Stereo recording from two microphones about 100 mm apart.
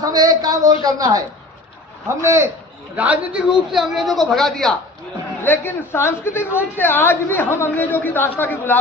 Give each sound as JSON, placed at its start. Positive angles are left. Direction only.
{"t": 0.0, "sound": "a woman's voice", "side_deg": -40}
{"t": 2.2, "sound": "a man's voice", "side_deg": -30}
{"t": 2.9, "sound": "a man's voice", "side_deg": -15}
{"t": 3.7, "sound": "a man's voice", "side_deg": 0}
{"t": 5.4, "sound": "a woman's voice", "side_deg": 20}